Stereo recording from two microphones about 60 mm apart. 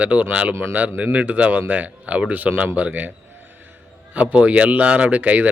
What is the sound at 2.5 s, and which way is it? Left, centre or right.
Speech, right.